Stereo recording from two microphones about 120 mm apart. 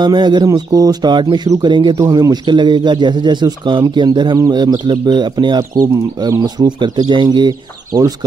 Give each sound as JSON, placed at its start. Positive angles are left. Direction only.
{"t": 0.0, "sound": "speech", "side_deg": -40}